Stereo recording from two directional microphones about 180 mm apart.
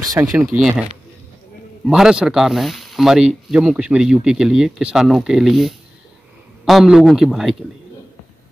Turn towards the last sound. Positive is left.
turn(degrees=0)  # may be behind; listen again after turning